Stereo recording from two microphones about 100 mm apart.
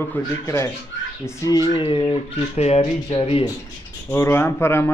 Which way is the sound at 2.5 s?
90° left.